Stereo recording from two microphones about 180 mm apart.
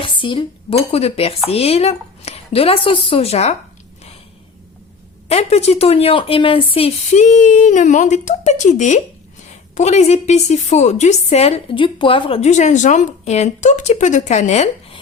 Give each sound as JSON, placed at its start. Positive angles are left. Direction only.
{"t": 0.0, "sound": "a woman's voice", "side_deg": 30}
{"t": 5.3, "sound": "a woman's voice", "side_deg": 35}